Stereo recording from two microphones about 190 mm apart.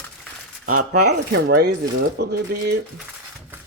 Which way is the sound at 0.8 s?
70° right (ahead or behind).